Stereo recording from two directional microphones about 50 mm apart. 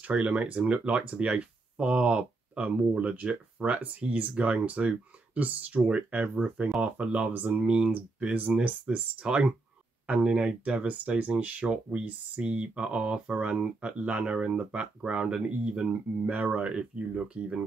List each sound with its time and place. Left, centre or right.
0.1 s speech: right
7.3 s speech: right
7.6 s speech: centre
8.2 s speech: right
16.3 s speech: right
16.5 s speech: centre